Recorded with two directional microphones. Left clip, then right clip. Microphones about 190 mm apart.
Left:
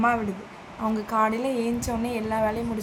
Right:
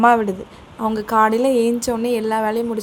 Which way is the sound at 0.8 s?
40° right (ahead or behind).